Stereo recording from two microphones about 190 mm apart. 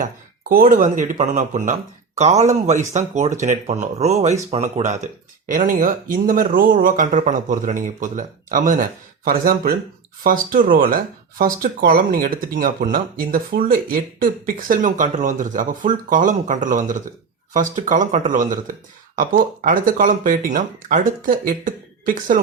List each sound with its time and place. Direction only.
0.0 s speech: 45° right (ahead or behind)